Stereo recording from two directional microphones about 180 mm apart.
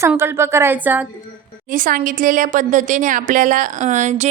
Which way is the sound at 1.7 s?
50° right (ahead or behind).